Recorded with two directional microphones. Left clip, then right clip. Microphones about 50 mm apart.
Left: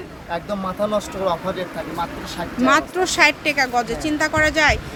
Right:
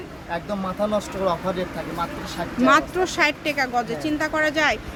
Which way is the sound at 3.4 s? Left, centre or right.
Centre.